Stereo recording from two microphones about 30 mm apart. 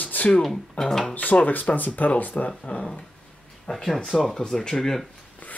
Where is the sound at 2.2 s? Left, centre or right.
Left.